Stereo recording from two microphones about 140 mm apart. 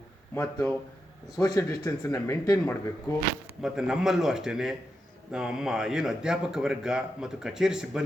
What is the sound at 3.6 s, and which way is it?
Speech, 5° right (ahead or behind).